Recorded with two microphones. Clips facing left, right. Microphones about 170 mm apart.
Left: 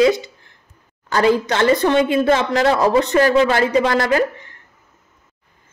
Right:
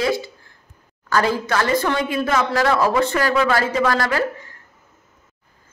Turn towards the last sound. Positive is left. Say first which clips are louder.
# left 4 dB
turn(degrees=20)  # may be behind; listen again after turning